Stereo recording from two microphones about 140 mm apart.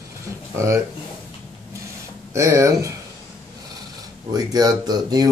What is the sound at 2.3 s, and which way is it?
Speech, 20° right (ahead or behind).